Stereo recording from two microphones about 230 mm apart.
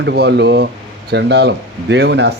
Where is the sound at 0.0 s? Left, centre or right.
Right.